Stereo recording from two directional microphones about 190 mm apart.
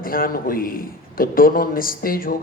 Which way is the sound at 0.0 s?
50° left (ahead or behind).